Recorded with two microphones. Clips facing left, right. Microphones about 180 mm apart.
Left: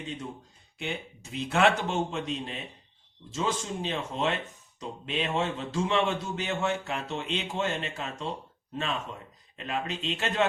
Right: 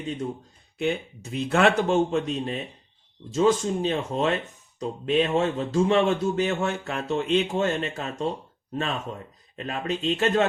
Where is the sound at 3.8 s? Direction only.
45° right (ahead or behind).